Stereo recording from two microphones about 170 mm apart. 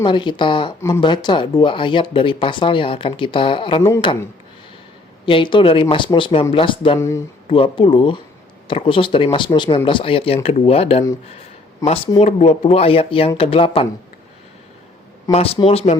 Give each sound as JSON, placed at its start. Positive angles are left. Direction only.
{"t": 0.0, "sound": "speech", "side_deg": 30}
{"t": 0.8, "sound": "speech", "side_deg": 15}
{"t": 1.0, "sound": "speech", "side_deg": 25}
{"t": 5.2, "sound": "speech", "side_deg": 30}
{"t": 15.3, "sound": "speech", "side_deg": 35}